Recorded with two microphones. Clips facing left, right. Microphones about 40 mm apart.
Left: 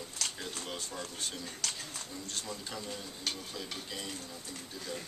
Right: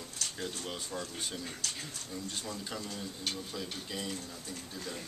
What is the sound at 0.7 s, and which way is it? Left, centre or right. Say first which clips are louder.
Speech: right 1 dB; centre.